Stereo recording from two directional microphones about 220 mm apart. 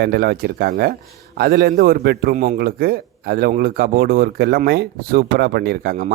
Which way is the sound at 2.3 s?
30° right (ahead or behind).